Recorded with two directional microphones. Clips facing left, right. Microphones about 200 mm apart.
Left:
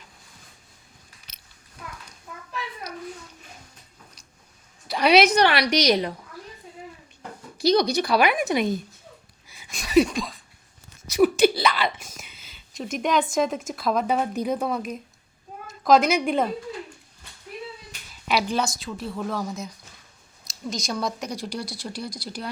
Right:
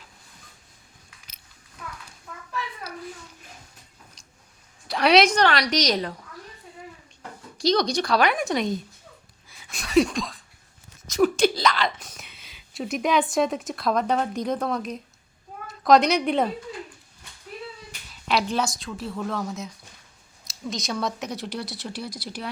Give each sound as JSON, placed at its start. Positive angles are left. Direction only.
{"t": 2.3, "sound": "a sound", "side_deg": 5}
{"t": 4.9, "sound": "a woman's voice", "side_deg": 0}
{"t": 7.2, "sound": "speech", "side_deg": 10}
{"t": 9.5, "sound": "a sound", "side_deg": 0}
{"t": 13.3, "sound": "speech", "side_deg": 0}
{"t": 18.1, "sound": "speech", "side_deg": 5}